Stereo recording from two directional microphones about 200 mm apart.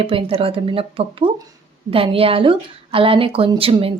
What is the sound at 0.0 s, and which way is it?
Speech, 30° right (ahead or behind).